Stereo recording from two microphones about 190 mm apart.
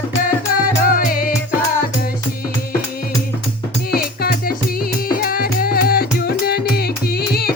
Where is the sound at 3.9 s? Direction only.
50° left (ahead or behind).